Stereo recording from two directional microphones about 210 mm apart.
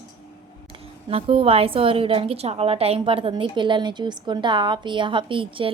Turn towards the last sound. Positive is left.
turn(degrees=-25)  # may be behind; listen again after turning